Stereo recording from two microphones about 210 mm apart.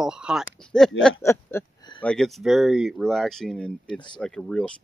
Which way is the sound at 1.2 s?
10° left (ahead or behind).